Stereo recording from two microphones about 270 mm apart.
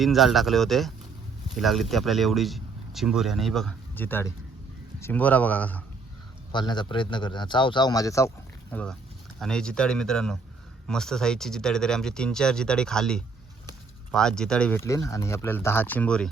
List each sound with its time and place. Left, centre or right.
0.0 s speech: centre
6.5 s a man's voice: centre